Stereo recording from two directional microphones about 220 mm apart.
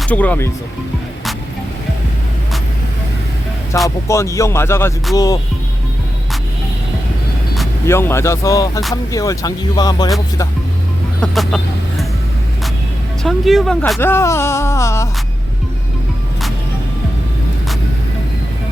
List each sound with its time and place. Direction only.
0.0 s speech: 5° left (ahead or behind)
3.8 s speech: 15° left (ahead or behind)
7.9 s speech: 10° left (ahead or behind)
11.2 s speech: centre (ahead or behind)
13.2 s speech: centre (ahead or behind)